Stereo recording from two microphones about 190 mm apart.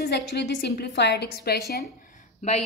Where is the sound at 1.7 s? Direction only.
50° left (ahead or behind).